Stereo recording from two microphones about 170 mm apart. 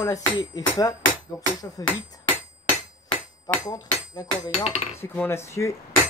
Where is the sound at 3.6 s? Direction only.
25° left (ahead or behind).